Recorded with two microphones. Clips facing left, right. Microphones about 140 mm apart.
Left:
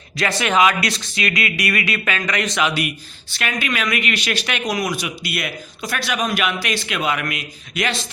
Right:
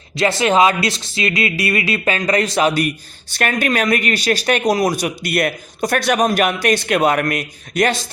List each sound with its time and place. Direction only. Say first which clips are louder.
0.2 s speech: right 4 dB; 30° right (ahead or behind); by 7.9 s 45° right (ahead or behind)